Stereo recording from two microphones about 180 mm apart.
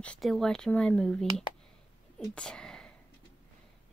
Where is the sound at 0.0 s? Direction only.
5° left (ahead or behind).